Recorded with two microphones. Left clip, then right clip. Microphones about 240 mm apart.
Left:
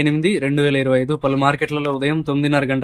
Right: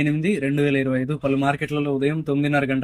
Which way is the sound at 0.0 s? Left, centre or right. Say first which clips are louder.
Left 4 dB; centre.